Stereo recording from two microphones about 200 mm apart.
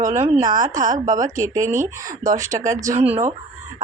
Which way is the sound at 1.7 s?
40° right (ahead or behind).